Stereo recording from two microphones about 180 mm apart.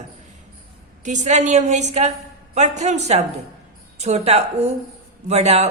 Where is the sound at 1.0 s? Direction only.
40° right (ahead or behind).